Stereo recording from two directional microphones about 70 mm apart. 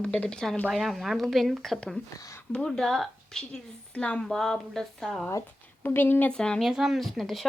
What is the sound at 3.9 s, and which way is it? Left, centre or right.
Speech, centre.